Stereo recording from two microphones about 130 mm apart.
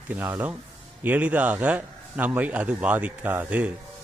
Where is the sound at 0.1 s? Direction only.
15° right (ahead or behind).